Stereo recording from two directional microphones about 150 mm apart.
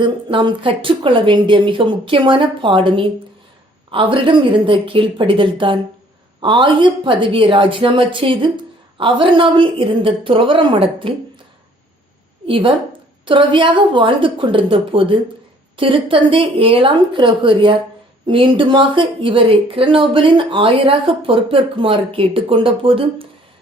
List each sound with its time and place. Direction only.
0.0 s a woman's voice: 35° right (ahead or behind)
12.5 s a woman's voice: 35° right (ahead or behind)